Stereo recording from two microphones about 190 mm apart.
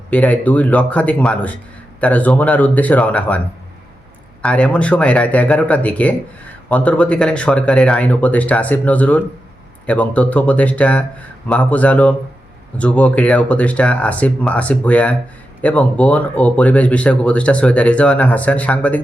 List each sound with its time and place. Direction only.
0.1 s speech: 10° left (ahead or behind)
4.4 s speech: 5° left (ahead or behind)